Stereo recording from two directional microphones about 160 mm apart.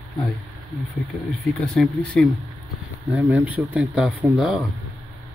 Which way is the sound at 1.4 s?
Centre (ahead or behind).